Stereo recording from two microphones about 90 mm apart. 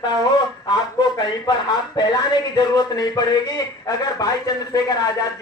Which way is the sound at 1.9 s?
50° left (ahead or behind).